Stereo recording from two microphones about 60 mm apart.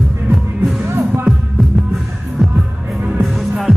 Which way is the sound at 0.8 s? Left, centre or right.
Right.